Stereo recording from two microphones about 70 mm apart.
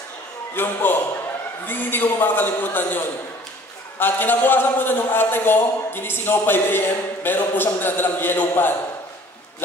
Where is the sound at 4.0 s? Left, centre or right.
Left.